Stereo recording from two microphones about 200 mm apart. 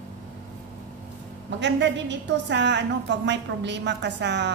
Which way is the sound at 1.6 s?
60° right (ahead or behind).